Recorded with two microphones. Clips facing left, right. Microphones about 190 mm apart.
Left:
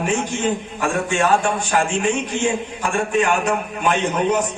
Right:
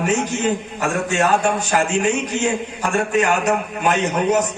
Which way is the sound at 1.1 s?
40° right (ahead or behind).